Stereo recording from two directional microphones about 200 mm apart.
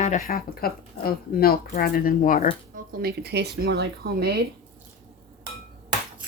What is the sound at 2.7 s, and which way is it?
Speech, 45° right (ahead or behind).